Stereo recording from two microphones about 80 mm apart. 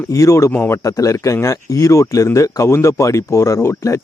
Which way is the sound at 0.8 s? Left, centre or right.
Left.